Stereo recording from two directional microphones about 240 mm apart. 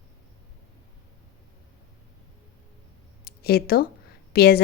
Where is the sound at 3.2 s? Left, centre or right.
Left.